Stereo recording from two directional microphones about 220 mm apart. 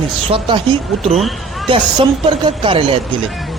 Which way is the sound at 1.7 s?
25° right (ahead or behind).